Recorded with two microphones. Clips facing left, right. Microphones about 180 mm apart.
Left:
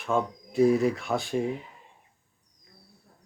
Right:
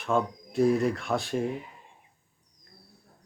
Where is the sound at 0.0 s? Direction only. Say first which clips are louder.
Even; centre (ahead or behind).